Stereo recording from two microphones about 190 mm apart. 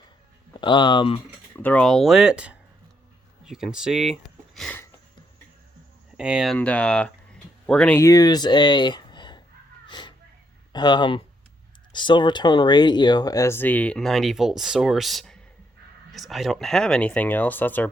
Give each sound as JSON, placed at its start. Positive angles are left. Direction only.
{"t": 0.6, "sound": "speech", "side_deg": 25}
{"t": 1.5, "sound": "speech", "side_deg": 10}
{"t": 6.1, "sound": "speech", "side_deg": -5}
{"t": 9.8, "sound": "a sound", "side_deg": 25}
{"t": 10.7, "sound": "speech", "side_deg": 25}